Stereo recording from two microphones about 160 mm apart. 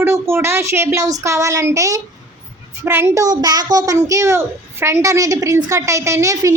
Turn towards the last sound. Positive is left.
turn(degrees=-20)  # may be behind; listen again after turning